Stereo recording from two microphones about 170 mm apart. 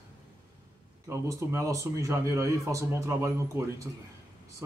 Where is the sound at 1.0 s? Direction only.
15° right (ahead or behind).